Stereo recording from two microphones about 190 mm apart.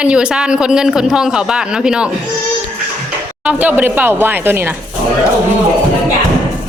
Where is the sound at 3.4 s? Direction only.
5° right (ahead or behind).